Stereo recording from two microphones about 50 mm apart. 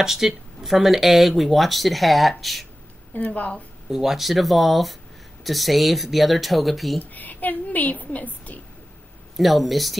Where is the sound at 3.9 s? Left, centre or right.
Centre.